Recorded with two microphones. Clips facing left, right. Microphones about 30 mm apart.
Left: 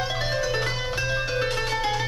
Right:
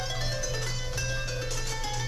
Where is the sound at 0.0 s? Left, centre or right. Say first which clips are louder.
Left 8 dB; left.